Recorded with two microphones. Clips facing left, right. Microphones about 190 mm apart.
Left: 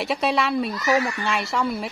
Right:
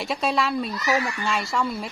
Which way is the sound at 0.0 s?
Centre (ahead or behind).